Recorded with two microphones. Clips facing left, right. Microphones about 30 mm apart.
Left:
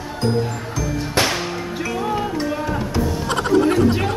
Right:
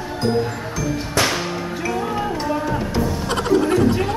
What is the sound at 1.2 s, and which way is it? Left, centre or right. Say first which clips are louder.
Music: even; left.